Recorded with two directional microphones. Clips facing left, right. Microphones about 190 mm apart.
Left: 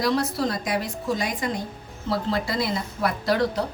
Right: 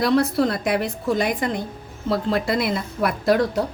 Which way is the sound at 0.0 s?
60° right (ahead or behind).